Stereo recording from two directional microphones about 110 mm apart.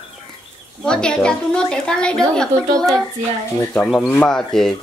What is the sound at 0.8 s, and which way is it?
Speech, 5° left (ahead or behind).